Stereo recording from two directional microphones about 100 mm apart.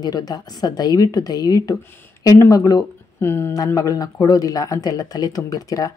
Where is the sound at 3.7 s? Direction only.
35° left (ahead or behind).